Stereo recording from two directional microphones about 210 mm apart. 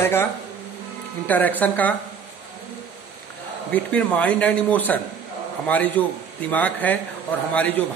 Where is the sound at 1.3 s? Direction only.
10° left (ahead or behind).